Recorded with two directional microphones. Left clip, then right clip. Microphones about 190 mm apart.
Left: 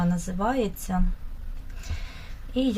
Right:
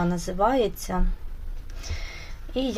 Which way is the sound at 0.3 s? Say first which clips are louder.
Right 5 dB; 25° right (ahead or behind).